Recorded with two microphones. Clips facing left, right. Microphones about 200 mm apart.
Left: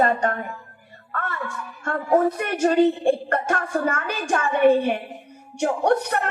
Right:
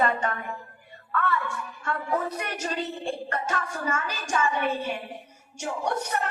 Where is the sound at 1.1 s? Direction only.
45° left (ahead or behind).